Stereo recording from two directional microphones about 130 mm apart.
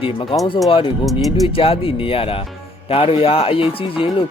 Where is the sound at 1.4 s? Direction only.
45° left (ahead or behind).